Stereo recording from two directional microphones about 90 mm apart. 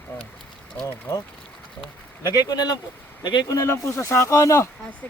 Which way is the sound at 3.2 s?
60° left (ahead or behind).